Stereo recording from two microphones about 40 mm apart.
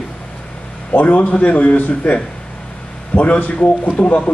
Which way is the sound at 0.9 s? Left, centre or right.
Left.